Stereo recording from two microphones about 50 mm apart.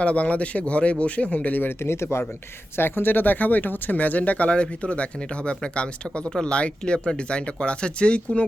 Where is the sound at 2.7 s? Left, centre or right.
Left.